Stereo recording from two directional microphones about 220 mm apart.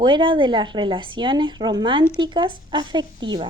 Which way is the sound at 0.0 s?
20° right (ahead or behind).